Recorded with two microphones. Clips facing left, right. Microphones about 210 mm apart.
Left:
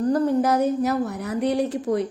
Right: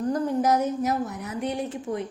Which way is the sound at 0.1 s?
60° left (ahead or behind).